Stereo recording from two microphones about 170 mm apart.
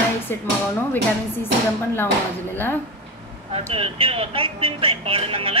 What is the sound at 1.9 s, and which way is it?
Speech, 10° left (ahead or behind).